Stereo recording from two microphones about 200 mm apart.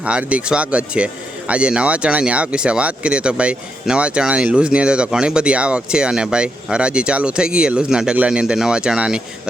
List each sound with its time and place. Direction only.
0.0 s speech: 5° right (ahead or behind)